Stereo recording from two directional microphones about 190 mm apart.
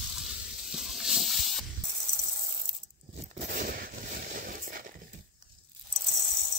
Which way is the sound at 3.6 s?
50° right (ahead or behind).